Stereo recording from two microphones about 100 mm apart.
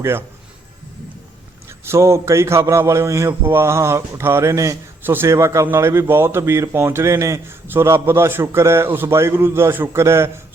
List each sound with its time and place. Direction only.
0.0 s speech: 25° right (ahead or behind)
1.8 s speech: 30° right (ahead or behind)